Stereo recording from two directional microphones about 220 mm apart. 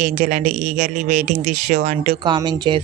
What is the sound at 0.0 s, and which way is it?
Speech, 35° right (ahead or behind).